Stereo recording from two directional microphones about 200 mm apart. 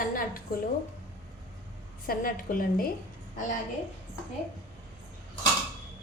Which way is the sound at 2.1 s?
45° left (ahead or behind).